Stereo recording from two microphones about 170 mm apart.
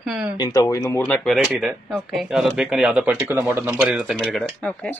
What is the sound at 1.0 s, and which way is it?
Speech, 5° left (ahead or behind).